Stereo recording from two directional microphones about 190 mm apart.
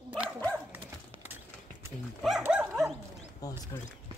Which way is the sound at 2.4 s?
5° right (ahead or behind).